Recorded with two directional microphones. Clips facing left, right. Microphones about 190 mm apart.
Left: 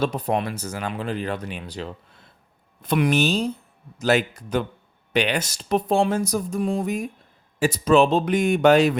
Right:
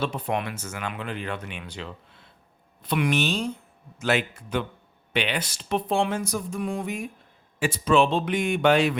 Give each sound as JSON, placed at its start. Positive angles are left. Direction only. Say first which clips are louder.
{"t": 0.0, "sound": "speech", "louder": "left 4 dB", "side_deg": 40}